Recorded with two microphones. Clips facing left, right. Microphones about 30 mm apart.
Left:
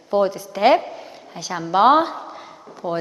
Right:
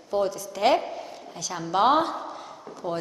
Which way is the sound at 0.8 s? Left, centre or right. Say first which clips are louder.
Left 1 dB; centre.